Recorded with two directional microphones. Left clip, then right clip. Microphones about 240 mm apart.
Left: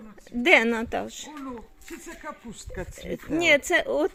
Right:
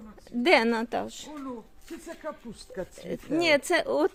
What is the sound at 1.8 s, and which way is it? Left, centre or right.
Speech, left.